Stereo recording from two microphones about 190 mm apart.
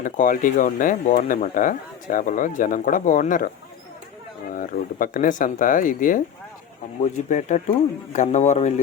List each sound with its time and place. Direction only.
0.0 s speech: 45° left (ahead or behind)
4.5 s speech: 45° left (ahead or behind)